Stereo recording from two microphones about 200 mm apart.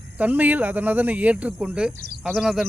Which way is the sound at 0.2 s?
10° right (ahead or behind).